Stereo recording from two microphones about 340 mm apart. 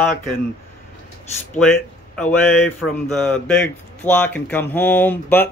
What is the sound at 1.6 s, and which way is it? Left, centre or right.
Speech, centre.